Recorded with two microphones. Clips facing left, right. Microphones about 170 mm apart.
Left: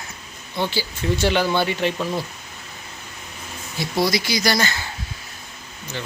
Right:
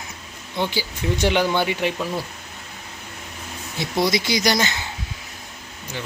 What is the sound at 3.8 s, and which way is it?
Speech, 20° right (ahead or behind).